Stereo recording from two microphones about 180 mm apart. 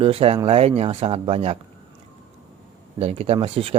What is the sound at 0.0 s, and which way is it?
Speech, 35° right (ahead or behind).